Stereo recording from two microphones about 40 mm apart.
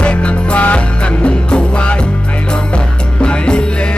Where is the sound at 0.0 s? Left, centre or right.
Left.